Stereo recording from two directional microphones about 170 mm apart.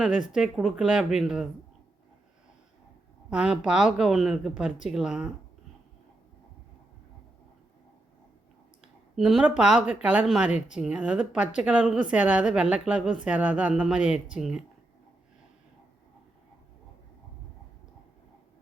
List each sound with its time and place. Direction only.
0.0 s speech: 5° right (ahead or behind)
3.2 s speech: 5° right (ahead or behind)
9.1 s speech: centre (ahead or behind)